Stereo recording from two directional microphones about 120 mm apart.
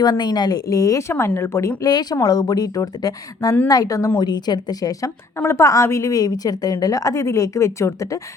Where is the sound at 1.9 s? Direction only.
35° left (ahead or behind).